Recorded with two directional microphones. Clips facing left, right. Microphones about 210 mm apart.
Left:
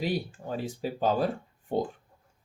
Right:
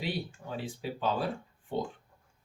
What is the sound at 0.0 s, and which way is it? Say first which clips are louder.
Speech: left 5 dB; 40° left (ahead or behind).